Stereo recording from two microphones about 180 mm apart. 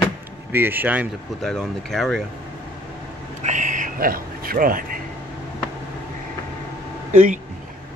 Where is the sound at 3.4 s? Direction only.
45° right (ahead or behind).